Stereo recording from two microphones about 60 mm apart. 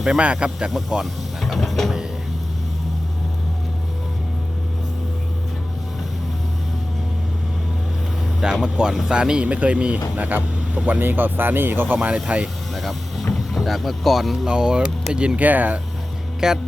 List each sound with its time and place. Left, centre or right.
0.2 s speech: centre
1.0 s vehicle: centre
8.4 s speech: centre; by 11.9 s right
12.0 s speech: centre
12.7 s speech: centre
14.4 s speech: centre
16.4 s speech: centre